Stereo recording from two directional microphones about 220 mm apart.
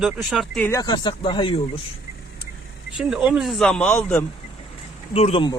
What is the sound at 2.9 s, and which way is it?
Speech, 5° right (ahead or behind).